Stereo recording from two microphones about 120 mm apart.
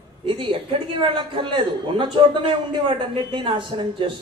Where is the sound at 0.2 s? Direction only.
45° right (ahead or behind).